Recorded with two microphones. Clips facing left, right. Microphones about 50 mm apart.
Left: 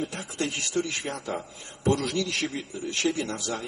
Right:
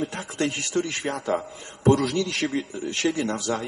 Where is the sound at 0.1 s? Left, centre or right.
Right.